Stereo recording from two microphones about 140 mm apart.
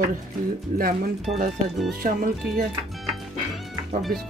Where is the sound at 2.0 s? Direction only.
75° right (ahead or behind).